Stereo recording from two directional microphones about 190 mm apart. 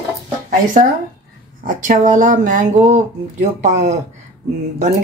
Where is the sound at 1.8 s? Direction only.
40° right (ahead or behind).